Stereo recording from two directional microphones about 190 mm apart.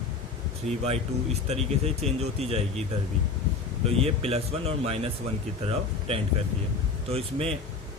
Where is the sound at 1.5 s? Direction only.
35° right (ahead or behind).